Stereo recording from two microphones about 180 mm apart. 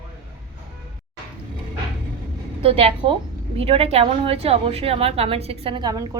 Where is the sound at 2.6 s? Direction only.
30° right (ahead or behind).